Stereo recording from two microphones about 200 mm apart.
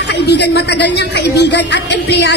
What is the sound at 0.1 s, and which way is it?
A woman's voice, 60° left (ahead or behind).